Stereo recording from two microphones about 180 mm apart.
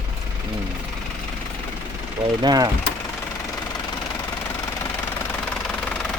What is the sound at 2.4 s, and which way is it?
Speech, 25° right (ahead or behind).